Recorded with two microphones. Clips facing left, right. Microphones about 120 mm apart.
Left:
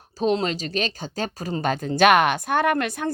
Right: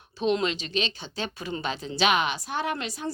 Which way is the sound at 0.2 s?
40° left (ahead or behind).